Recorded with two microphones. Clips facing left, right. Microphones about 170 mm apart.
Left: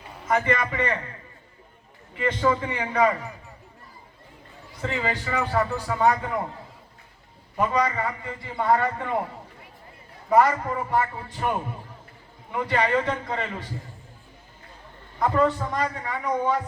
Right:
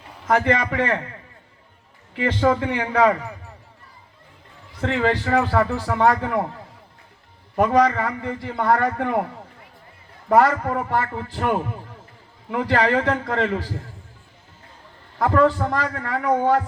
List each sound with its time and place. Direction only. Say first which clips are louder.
0.3 s a man's voice: right 4 dB; 80° right
2.1 s a man's voice: right 4 dB; 75° right (ahead or behind)
4.8 s a man's voice: right 7 dB; 70° right (ahead or behind)
7.5 s a man's voice: right 6 dB; 70° right (ahead or behind)
10.2 s a man's voice: right 3 dB; 70° right (ahead or behind)
15.2 s a man's voice: right 4 dB; 70° right (ahead or behind)